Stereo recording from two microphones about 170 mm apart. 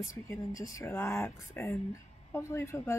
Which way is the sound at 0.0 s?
20° left (ahead or behind).